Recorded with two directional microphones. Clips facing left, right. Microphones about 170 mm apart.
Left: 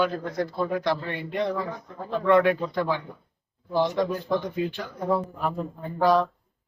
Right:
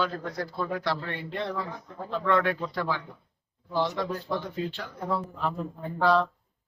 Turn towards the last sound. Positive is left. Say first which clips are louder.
# left 2 dB
turn(degrees=15)  # may be behind; listen again after turning